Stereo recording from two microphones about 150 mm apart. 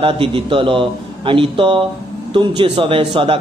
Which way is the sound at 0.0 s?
35° right (ahead or behind).